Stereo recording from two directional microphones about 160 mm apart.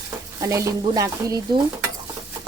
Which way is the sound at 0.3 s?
20° right (ahead or behind).